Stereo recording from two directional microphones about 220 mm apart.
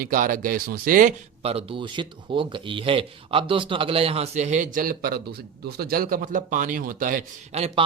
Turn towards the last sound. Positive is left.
turn(degrees=-35)  # may be behind; listen again after turning